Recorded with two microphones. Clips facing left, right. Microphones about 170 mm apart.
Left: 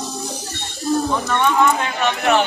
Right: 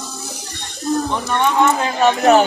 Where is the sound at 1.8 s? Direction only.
35° right (ahead or behind).